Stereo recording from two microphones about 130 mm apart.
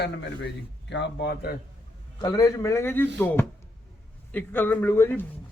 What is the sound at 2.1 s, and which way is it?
Speech, 30° left (ahead or behind).